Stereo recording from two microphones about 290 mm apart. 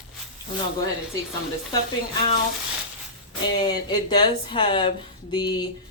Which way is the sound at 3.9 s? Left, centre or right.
Centre.